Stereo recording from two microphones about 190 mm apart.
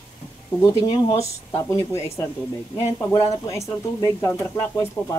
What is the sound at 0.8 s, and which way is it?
Speech, 25° left (ahead or behind).